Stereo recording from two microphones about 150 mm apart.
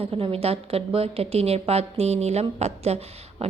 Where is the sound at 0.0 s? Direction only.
40° right (ahead or behind).